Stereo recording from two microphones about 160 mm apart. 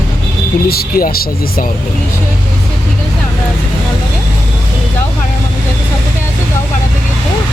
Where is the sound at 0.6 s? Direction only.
70° left (ahead or behind).